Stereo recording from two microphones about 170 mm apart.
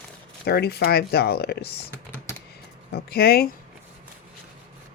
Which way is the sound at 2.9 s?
65° left (ahead or behind).